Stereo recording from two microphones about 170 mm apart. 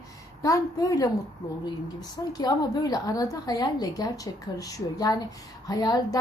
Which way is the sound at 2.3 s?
20° left (ahead or behind).